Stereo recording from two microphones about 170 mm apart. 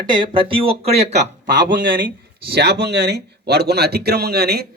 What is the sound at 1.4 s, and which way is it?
Speech, 55° right (ahead or behind).